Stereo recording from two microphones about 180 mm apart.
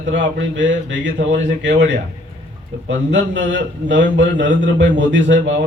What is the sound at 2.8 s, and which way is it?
A man's voice, 85° right.